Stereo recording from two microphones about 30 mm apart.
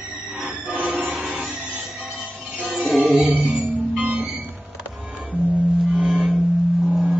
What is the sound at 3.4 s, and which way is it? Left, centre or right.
Music, right.